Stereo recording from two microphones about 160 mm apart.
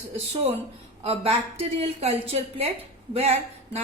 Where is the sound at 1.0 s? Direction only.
40° right (ahead or behind).